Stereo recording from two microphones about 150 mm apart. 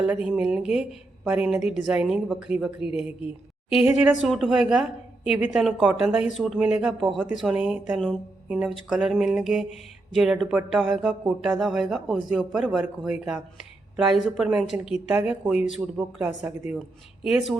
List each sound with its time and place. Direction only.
0.0 s a woman's voice: 5° right (ahead or behind)